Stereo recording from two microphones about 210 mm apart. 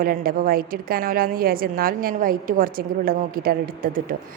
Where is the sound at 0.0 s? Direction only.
45° right (ahead or behind).